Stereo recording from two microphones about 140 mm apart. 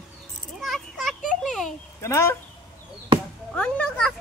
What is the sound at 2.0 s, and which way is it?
Speech, 20° left (ahead or behind).